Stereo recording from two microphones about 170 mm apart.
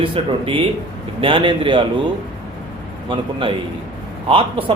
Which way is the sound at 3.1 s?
30° right (ahead or behind).